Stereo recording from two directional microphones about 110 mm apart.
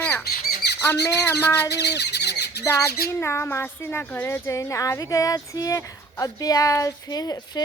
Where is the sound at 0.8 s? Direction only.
25° left (ahead or behind).